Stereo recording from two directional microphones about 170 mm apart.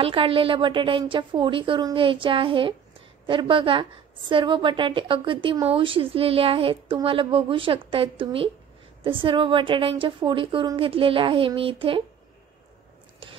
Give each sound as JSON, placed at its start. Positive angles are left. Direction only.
{"t": 0.0, "sound": "a woman's voice", "side_deg": -30}